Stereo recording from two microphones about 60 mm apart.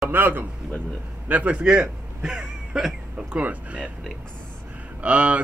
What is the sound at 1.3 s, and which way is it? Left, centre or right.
Speech, right.